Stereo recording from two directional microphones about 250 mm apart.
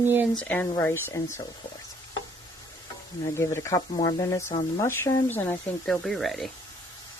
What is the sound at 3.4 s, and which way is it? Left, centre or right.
Speech, centre.